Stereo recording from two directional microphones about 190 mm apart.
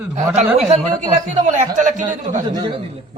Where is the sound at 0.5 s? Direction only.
35° right (ahead or behind).